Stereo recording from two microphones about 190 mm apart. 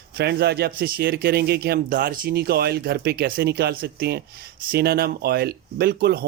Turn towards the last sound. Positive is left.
turn(degrees=-55)  # may be behind; listen again after turning